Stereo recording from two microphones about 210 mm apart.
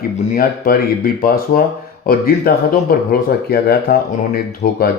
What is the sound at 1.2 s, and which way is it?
Speech, 45° left (ahead or behind).